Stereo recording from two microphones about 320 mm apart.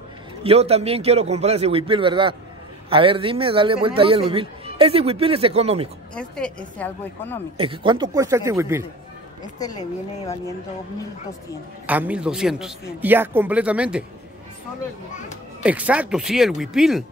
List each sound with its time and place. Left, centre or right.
0.4 s a man's voice: centre
6.1 s a woman's voice: centre
7.5 s a man's voice: centre
9.6 s speech: centre
11.8 s a woman's voice: centre
15.6 s a woman's voice: centre